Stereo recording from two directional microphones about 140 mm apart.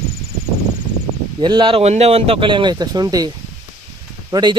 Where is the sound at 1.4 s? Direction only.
35° right (ahead or behind).